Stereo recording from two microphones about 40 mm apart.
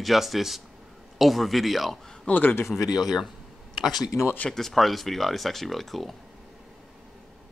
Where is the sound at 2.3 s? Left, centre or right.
Left.